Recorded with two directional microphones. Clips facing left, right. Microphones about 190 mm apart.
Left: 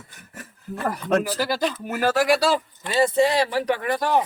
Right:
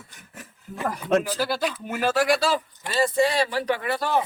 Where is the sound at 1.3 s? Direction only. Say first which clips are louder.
Left 2 dB; 10° left (ahead or behind).